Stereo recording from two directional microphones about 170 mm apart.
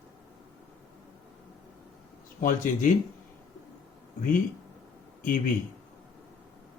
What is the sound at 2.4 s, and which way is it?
Speech, 50° left (ahead or behind).